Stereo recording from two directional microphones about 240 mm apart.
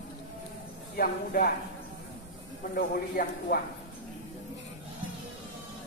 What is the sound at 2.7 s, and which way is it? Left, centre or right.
Speech, left.